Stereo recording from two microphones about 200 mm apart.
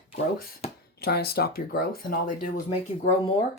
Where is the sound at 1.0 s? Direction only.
50° left (ahead or behind).